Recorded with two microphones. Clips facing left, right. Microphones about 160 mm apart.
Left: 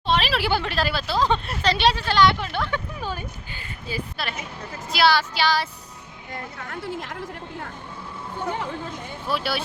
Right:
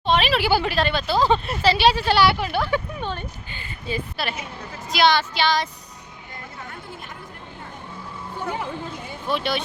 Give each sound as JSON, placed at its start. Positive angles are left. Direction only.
{"t": 0.1, "sound": "speech", "side_deg": 0}
{"t": 3.0, "sound": "speech", "side_deg": 5}
{"t": 6.6, "sound": "speech", "side_deg": 80}
{"t": 9.2, "sound": "speech", "side_deg": 5}